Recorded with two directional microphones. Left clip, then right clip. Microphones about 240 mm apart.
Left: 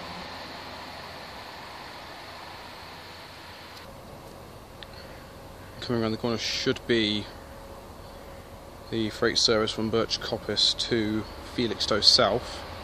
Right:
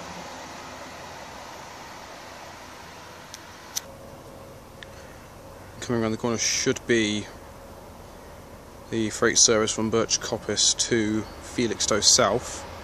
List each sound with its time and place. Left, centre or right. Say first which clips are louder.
5.8 s speech: right 2 dB; centre
8.9 s speech: right 3 dB; centre